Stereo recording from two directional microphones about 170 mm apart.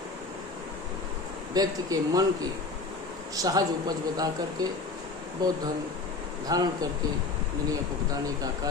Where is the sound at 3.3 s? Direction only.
20° right (ahead or behind).